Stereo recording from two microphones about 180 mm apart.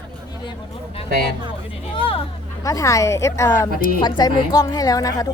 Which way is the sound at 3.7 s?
50° left (ahead or behind).